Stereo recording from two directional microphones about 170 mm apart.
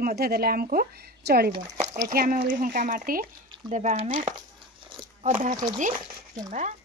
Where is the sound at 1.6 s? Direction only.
40° right (ahead or behind).